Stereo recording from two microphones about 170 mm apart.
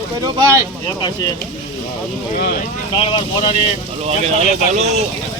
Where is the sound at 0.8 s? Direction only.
25° left (ahead or behind).